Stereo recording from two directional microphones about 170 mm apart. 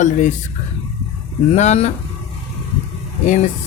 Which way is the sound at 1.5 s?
40° left (ahead or behind).